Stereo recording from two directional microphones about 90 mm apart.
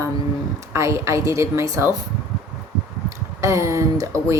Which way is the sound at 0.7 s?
35° right (ahead or behind).